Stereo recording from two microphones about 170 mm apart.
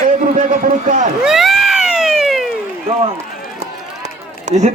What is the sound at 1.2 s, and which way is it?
Cat, centre (ahead or behind).